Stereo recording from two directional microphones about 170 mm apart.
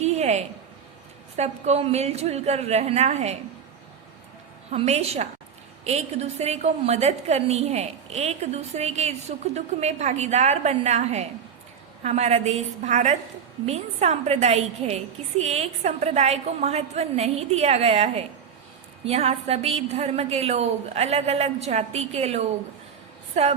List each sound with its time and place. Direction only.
0.0 s a sound: 40° right (ahead or behind)
1.4 s a woman's voice: 40° right (ahead or behind)
4.7 s a woman's voice: 40° right (ahead or behind)